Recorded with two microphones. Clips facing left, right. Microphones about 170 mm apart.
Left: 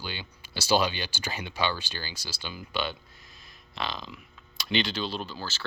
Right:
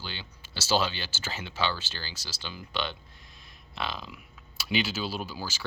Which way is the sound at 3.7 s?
Centre (ahead or behind).